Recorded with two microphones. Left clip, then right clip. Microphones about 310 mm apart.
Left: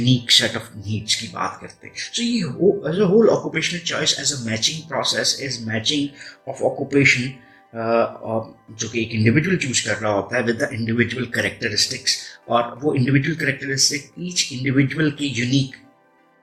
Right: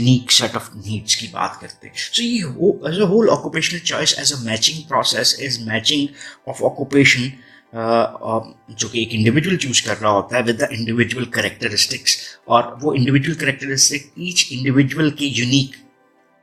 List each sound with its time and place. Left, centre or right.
0.0 s speech: right